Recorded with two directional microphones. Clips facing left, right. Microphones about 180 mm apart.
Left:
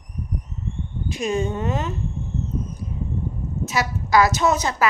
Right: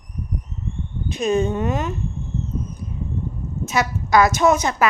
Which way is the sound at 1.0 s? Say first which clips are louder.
Right 4 dB; 20° right (ahead or behind).